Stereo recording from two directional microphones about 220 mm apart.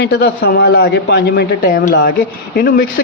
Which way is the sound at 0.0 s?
50° left (ahead or behind).